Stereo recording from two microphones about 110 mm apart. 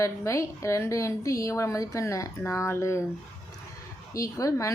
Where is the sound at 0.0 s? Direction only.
30° left (ahead or behind).